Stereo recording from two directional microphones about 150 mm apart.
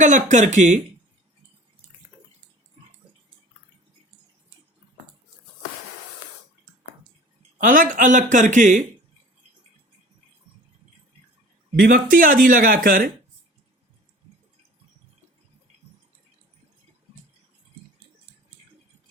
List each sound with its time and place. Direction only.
0.0 s speech: 55° right (ahead or behind)
7.6 s speech: 65° right (ahead or behind)
11.8 s speech: 65° right (ahead or behind)